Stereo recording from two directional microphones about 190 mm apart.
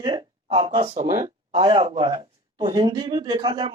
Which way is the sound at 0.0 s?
25° right (ahead or behind).